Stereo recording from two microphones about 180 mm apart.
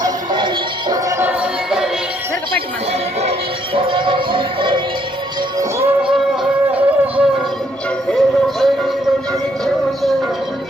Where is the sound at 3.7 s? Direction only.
30° right (ahead or behind).